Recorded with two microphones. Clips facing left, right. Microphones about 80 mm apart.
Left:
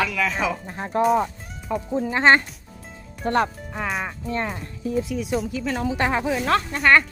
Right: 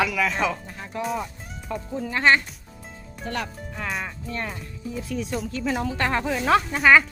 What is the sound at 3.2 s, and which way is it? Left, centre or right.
Speech, left.